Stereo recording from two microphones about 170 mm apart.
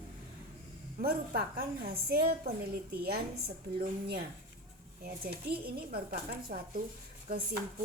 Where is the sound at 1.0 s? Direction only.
60° right (ahead or behind).